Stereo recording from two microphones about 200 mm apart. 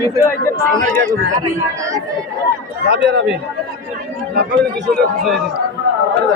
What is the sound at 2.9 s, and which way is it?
Speech, 60° right (ahead or behind).